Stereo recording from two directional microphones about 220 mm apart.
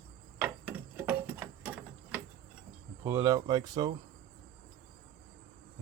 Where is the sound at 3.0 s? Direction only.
15° right (ahead or behind).